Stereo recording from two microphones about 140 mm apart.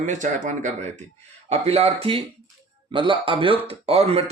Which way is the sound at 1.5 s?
50° right (ahead or behind).